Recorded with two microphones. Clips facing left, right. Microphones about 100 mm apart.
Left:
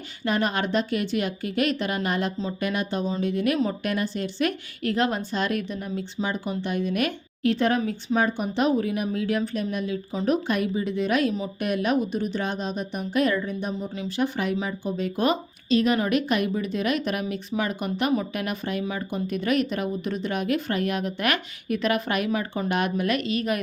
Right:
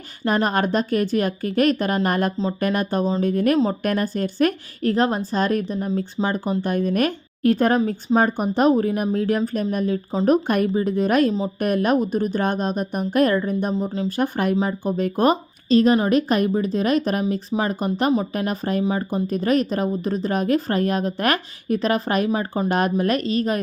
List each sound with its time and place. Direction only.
0.3 s a woman's voice: 40° right (ahead or behind)